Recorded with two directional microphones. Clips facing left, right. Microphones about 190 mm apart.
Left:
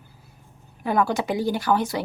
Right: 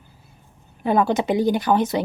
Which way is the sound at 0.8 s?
20° right (ahead or behind).